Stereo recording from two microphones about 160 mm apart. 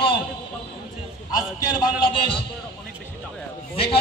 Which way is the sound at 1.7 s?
30° left (ahead or behind).